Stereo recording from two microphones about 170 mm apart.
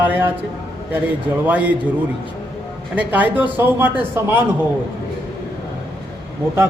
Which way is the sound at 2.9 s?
10° right (ahead or behind).